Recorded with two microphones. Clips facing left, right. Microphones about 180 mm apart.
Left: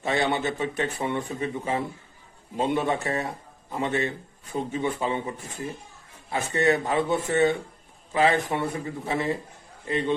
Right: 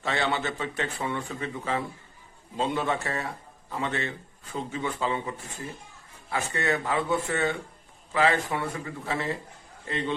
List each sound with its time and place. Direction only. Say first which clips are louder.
0.0 s speech: left 3 dB; 15° left (ahead or behind)
6.3 s a man's voice: left 5 dB; 20° left (ahead or behind)